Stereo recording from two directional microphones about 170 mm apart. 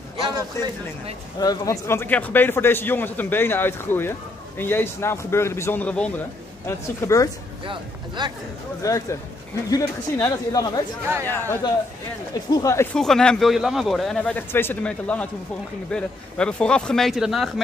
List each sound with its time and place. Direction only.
0.6 s a man's voice: 15° left (ahead or behind)
8.2 s speech: 25° right (ahead or behind)
8.8 s a man's voice: 20° left (ahead or behind)
12.9 s a man's voice: 5° left (ahead or behind)